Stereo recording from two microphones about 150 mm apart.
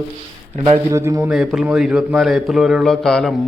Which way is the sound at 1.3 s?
Centre (ahead or behind).